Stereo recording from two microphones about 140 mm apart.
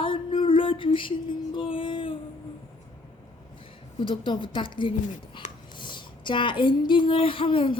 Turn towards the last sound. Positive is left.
turn(degrees=40)  # may be behind; listen again after turning